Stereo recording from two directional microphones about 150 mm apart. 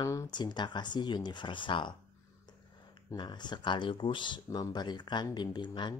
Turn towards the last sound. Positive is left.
turn(degrees=30)  # may be behind; listen again after turning